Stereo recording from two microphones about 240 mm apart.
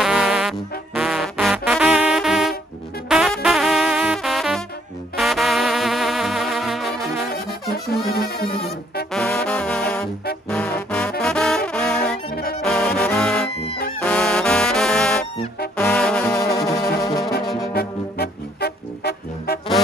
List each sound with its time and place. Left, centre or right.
0.0 s trombone: centre
3.1 s music: centre
5.1 s brass instrument: centre
7.7 s music: left
9.1 s music: centre
12.6 s trombone: centre
14.0 s music: centre
15.8 s trombone: centre
16.5 s music: centre
17.7 s music: left